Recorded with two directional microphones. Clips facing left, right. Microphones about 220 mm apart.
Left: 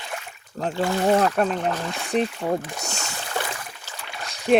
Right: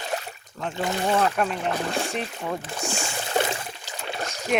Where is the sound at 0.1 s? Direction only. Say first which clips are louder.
Right 5 dB; 35° right (ahead or behind).